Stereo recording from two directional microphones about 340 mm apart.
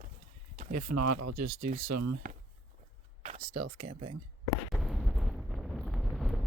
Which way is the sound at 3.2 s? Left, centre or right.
Centre.